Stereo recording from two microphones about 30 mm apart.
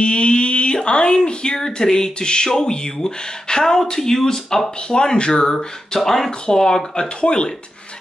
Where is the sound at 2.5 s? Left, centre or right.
Centre.